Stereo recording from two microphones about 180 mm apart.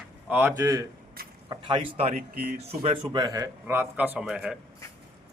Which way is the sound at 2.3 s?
60° right (ahead or behind).